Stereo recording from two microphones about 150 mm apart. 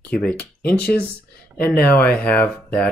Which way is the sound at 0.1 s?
5° left (ahead or behind).